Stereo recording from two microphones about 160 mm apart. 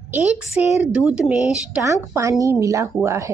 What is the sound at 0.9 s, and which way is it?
A woman's voice, 5° right (ahead or behind).